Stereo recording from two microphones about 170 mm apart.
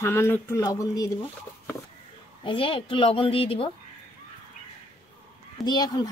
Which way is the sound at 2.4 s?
30° left (ahead or behind).